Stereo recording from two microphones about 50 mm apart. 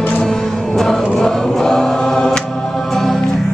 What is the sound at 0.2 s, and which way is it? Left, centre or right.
Music, centre.